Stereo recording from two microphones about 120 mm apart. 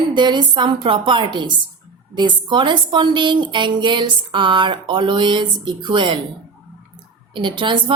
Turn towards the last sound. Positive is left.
turn(degrees=-40)  # may be behind; listen again after turning